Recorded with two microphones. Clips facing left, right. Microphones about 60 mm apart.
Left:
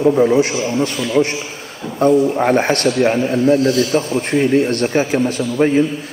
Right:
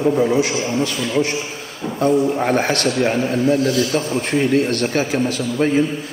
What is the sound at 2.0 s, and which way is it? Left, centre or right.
Speech, left.